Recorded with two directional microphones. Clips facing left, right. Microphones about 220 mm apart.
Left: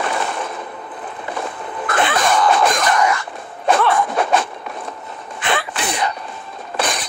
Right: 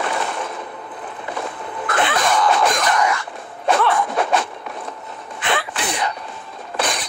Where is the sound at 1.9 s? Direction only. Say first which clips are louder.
Left 2 dB; 45° left (ahead or behind).